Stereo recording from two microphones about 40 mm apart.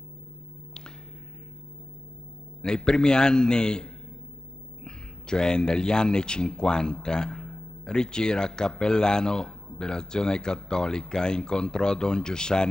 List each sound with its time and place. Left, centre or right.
2.6 s speech: left